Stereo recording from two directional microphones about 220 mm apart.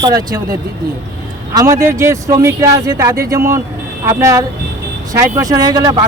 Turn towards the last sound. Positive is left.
turn(degrees=-15)  # may be behind; listen again after turning